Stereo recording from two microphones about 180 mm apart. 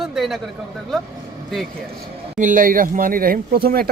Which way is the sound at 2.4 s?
45° right (ahead or behind).